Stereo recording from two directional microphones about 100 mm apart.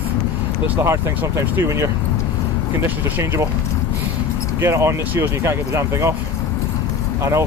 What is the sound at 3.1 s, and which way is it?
Speech, 25° right (ahead or behind).